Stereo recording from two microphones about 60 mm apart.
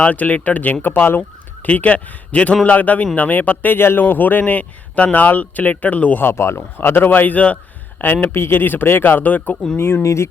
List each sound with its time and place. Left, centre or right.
0.0 s a man's voice: left
6.2 s a man's voice: left
9.7 s speech: left
10.0 s speech: left